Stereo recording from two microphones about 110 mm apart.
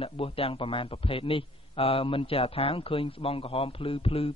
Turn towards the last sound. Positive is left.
turn(degrees=55)  # may be behind; listen again after turning